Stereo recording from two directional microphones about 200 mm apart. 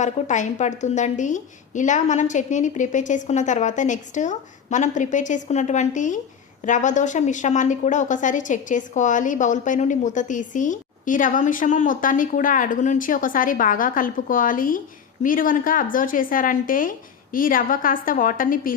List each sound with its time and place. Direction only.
0.0 s a woman's voice: 35° left (ahead or behind)